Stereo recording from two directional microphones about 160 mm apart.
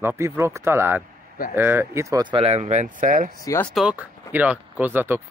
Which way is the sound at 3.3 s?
20° left (ahead or behind).